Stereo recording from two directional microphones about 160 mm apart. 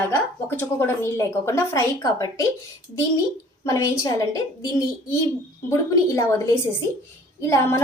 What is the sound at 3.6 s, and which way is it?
Speech, 20° left (ahead or behind).